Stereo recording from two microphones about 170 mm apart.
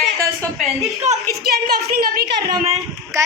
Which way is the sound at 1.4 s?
65° right (ahead or behind).